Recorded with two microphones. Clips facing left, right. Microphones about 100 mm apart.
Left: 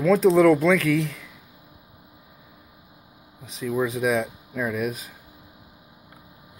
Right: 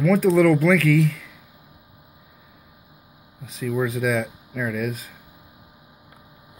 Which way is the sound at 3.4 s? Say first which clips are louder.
Right 1 dB; 20° left (ahead or behind).